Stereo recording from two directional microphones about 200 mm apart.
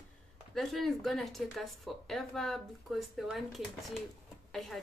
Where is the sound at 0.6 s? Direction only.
Centre (ahead or behind).